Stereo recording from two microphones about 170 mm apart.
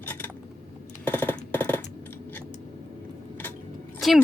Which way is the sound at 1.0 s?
10° left (ahead or behind).